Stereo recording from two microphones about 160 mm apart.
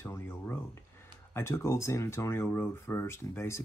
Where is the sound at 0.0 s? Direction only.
15° left (ahead or behind).